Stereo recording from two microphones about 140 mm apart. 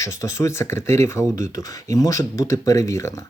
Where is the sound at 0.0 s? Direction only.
20° left (ahead or behind).